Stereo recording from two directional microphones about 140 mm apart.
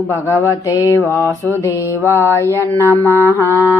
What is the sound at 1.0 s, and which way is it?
Mantra, 15° right (ahead or behind).